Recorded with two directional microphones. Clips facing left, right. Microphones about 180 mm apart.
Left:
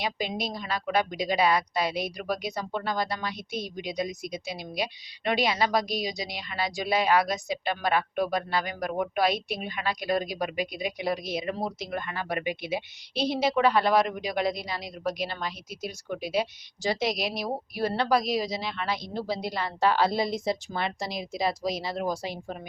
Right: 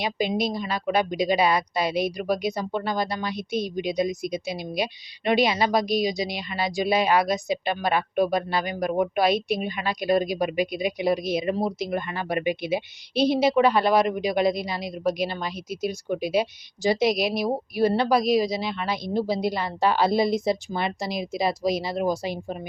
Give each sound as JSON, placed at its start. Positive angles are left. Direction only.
{"t": 0.0, "sound": "speech", "side_deg": -15}
{"t": 4.5, "sound": "a woman's voice", "side_deg": -15}